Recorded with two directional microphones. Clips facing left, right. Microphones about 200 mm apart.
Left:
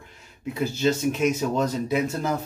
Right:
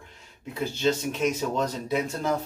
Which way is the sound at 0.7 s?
5° left (ahead or behind).